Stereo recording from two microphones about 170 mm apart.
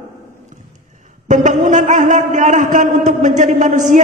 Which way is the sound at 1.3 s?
45° right (ahead or behind).